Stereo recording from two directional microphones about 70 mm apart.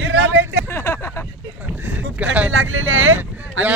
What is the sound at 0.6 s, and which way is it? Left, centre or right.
Speech, left.